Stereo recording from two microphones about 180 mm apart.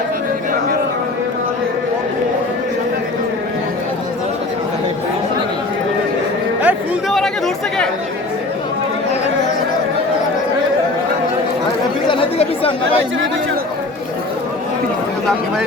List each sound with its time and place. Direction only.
6.6 s chatter: 10° right (ahead or behind)
7.2 s chatter: centre (ahead or behind)
12.0 s chatter: 30° left (ahead or behind)